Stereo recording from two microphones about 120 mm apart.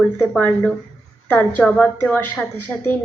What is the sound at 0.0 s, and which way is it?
A woman's voice, 10° left (ahead or behind).